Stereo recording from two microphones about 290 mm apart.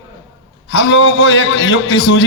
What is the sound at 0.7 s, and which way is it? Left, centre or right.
A man's voice, left.